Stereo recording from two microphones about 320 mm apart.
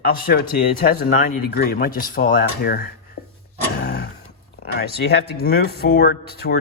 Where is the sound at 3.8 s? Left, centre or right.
Left.